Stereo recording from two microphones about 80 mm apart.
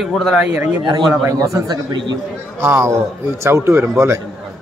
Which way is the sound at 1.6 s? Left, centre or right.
Right.